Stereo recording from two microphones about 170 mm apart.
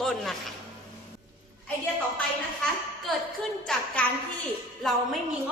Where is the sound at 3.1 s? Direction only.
Centre (ahead or behind).